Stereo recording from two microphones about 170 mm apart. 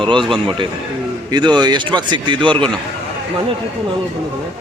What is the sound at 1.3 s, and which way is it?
Speech, 25° right (ahead or behind).